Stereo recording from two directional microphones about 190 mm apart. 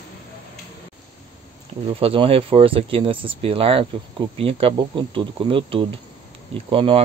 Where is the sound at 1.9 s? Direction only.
30° right (ahead or behind).